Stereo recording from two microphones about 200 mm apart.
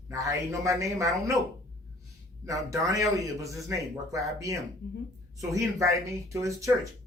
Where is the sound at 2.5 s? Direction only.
15° right (ahead or behind).